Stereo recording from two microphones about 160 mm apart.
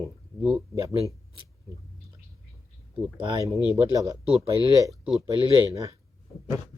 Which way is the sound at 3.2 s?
20° right (ahead or behind).